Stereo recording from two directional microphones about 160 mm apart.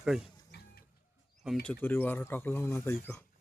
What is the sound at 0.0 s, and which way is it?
Speech, 5° right (ahead or behind).